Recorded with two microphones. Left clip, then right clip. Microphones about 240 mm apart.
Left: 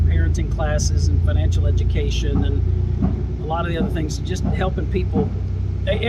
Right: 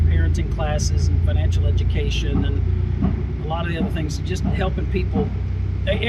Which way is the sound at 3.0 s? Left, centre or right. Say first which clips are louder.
Even; left.